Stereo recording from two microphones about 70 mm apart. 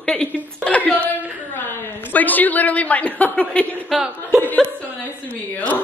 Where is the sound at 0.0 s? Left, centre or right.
Centre.